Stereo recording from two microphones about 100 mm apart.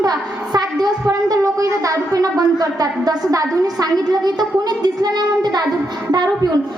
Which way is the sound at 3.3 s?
40° right (ahead or behind).